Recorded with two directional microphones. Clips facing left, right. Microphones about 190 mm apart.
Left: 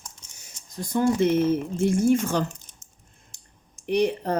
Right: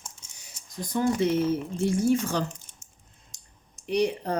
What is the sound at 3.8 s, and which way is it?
Speech, 55° left (ahead or behind).